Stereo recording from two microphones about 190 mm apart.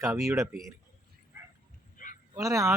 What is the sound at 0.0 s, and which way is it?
Speech, 15° right (ahead or behind).